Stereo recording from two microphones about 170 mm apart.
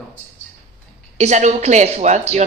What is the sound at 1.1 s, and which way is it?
Speech, 40° right (ahead or behind).